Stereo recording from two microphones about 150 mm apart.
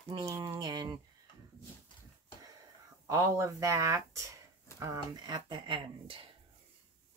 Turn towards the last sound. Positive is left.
turn(degrees=-35)  # may be behind; listen again after turning